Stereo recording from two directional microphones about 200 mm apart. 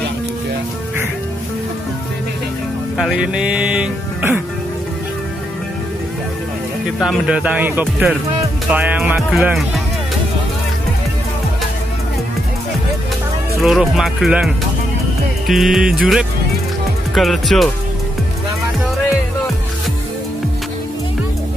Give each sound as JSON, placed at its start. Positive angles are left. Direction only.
{"t": 3.0, "sound": "speech", "side_deg": -5}
{"t": 7.0, "sound": "speech", "side_deg": -5}
{"t": 8.7, "sound": "music", "side_deg": -10}
{"t": 13.6, "sound": "speech", "side_deg": 0}